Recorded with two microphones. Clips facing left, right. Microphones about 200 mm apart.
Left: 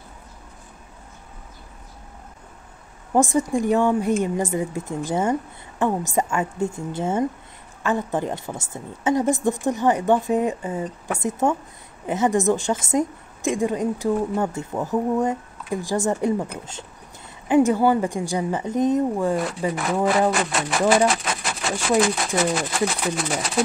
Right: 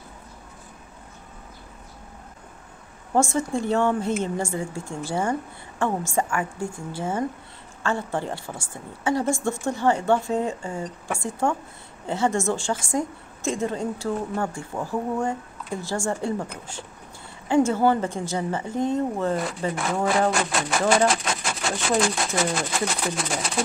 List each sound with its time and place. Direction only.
3.2 s a woman's voice: 15° left (ahead or behind)
17.5 s a woman's voice: 15° left (ahead or behind)
19.7 s speech: centre (ahead or behind)